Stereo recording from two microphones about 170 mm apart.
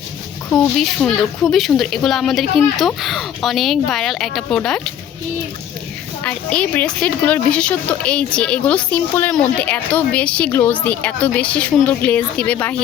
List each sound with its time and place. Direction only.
0.5 s speech: 5° left (ahead or behind)
6.2 s speech: 5° left (ahead or behind)